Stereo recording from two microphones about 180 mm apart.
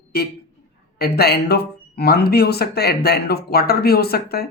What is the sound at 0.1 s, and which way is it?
Speech, 60° left (ahead or behind).